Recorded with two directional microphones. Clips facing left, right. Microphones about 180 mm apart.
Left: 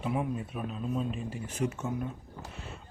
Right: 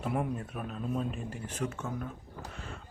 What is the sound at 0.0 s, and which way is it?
Speech, centre (ahead or behind).